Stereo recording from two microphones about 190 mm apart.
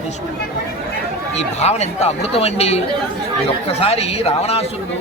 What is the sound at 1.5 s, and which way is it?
A man's voice, 35° left (ahead or behind).